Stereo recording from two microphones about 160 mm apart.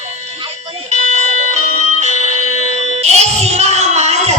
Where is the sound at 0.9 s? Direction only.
45° right (ahead or behind).